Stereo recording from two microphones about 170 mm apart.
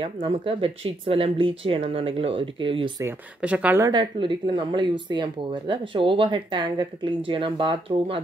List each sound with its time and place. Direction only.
0.0 s speech: 30° right (ahead or behind)
3.3 s a woman's voice: 10° right (ahead or behind)
3.8 s speech: 25° right (ahead or behind)